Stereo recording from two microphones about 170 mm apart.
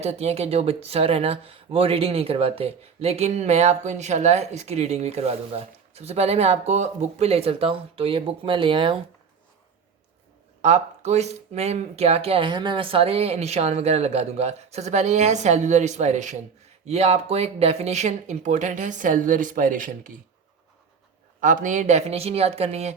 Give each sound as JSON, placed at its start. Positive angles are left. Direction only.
{"t": 0.0, "sound": "speech", "side_deg": -40}
{"t": 10.6, "sound": "speech", "side_deg": -40}
{"t": 21.4, "sound": "speech", "side_deg": -50}